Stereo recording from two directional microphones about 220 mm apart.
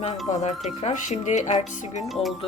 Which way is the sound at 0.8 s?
30° left (ahead or behind).